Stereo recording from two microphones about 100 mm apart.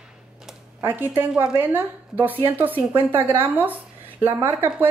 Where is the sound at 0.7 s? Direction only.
20° right (ahead or behind).